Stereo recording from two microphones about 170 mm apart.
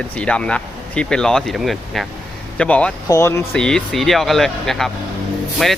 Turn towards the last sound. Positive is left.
turn(degrees=0)  # may be behind; listen again after turning